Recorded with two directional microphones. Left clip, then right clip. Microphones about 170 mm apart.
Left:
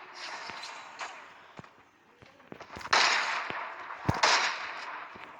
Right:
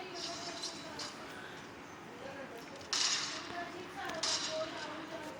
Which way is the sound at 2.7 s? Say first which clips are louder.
Left 10 dB; 50° left (ahead or behind).